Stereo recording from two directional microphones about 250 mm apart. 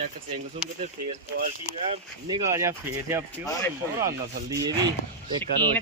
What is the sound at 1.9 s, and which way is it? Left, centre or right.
Speech, centre.